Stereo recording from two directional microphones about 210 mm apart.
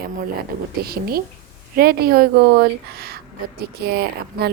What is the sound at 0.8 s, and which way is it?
A woman's voice, 45° right (ahead or behind).